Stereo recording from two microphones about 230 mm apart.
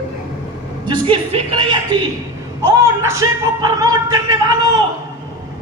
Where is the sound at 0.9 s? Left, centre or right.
Right.